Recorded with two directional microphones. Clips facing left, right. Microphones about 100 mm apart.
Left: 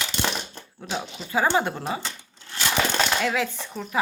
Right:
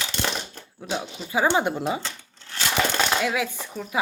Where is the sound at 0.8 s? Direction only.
10° right (ahead or behind).